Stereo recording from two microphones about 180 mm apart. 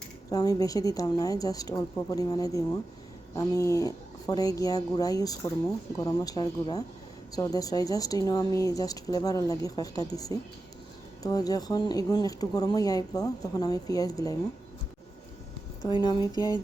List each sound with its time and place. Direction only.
0.3 s speech: 20° left (ahead or behind)
15.8 s speech: 25° left (ahead or behind)